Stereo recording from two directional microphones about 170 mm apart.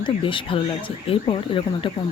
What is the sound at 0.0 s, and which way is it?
Speech, 30° left (ahead or behind).